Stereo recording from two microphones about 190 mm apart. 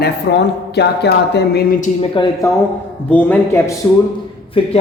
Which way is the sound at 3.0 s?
5° left (ahead or behind).